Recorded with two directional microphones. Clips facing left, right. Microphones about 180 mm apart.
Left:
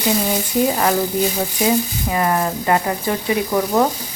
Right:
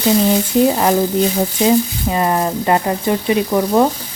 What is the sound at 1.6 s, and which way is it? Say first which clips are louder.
Speech: right 4 dB; 25° right (ahead or behind).